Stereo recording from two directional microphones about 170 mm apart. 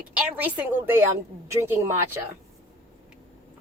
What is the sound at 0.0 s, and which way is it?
A woman's voice, 5° right (ahead or behind).